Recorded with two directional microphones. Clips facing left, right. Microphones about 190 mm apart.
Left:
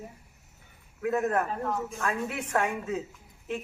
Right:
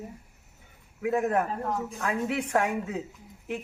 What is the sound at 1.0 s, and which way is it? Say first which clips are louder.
A man's voice: right 1 dB; 15° right (ahead or behind).